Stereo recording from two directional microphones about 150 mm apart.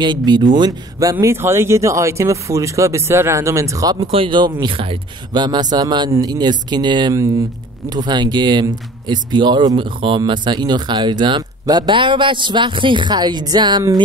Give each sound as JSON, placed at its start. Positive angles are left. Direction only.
{"t": 0.0, "sound": "speech", "side_deg": -30}
{"t": 4.0, "sound": "speech", "side_deg": -40}